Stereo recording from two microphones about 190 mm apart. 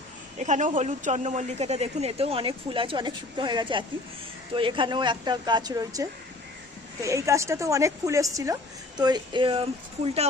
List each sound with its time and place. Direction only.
0.3 s a woman's voice: 40° right (ahead or behind)